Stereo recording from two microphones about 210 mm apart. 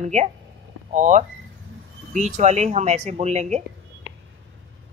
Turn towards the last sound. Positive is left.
turn(degrees=-30)  # may be behind; listen again after turning